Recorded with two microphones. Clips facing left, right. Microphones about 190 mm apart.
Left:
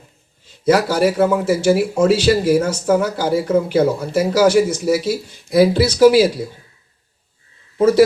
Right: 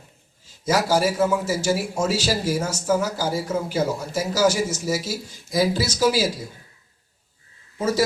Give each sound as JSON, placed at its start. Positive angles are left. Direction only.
{"t": 0.4, "sound": "a man's voice", "side_deg": 60}
{"t": 7.8, "sound": "a man's voice", "side_deg": 60}